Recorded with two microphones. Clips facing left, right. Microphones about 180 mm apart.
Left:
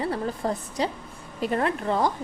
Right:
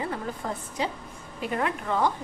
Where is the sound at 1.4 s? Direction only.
35° left (ahead or behind).